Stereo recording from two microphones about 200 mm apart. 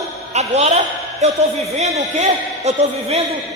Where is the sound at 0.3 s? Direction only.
35° right (ahead or behind).